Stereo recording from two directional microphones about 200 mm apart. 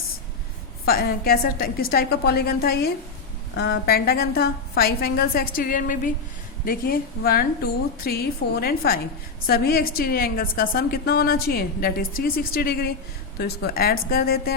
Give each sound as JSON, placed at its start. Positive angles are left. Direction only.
{"t": 0.9, "sound": "a woman's voice", "side_deg": 50}